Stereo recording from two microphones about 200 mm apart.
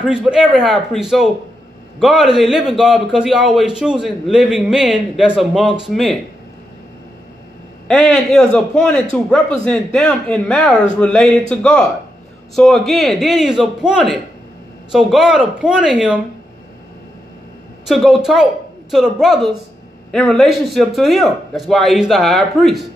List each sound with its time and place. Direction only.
0.0 s speech: 5° right (ahead or behind)
7.9 s speech: centre (ahead or behind)
17.8 s speech: centre (ahead or behind)